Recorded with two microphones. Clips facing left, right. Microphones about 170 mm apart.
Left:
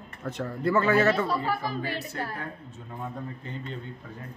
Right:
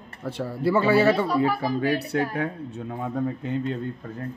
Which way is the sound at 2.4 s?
75° right (ahead or behind).